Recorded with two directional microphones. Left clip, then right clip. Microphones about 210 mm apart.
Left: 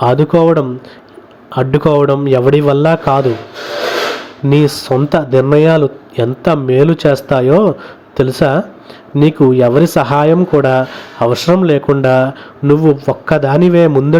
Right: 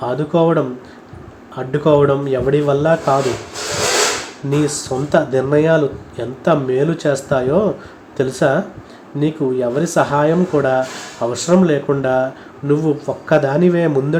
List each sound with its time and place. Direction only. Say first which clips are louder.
0.0 s speech: left 6 dB; 35° left (ahead or behind)
4.4 s speech: left 7 dB; 35° left (ahead or behind)